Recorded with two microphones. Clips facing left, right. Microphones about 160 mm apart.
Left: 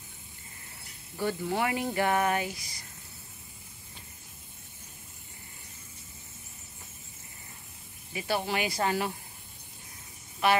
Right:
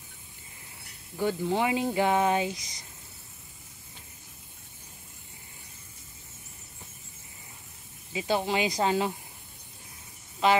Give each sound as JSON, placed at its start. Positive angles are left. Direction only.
{"t": 1.1, "sound": "speech", "side_deg": -15}
{"t": 8.1, "sound": "speech", "side_deg": -20}
{"t": 10.4, "sound": "a woman's voice", "side_deg": -15}